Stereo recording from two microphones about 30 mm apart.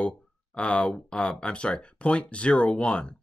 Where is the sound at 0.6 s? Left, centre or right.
Left.